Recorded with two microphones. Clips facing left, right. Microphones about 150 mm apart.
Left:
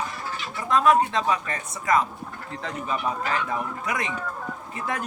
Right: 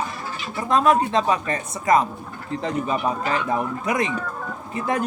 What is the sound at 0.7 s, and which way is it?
A man's voice, 25° right (ahead or behind).